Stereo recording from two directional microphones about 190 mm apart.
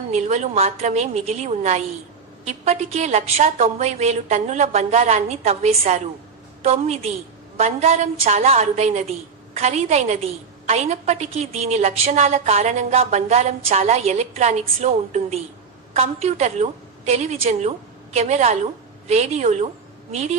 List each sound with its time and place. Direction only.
0.1 s a woman's voice: 35° right (ahead or behind)